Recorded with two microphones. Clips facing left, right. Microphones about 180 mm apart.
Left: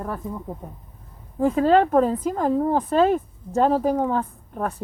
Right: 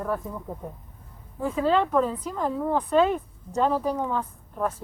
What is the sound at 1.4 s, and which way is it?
Speech, 45° left (ahead or behind).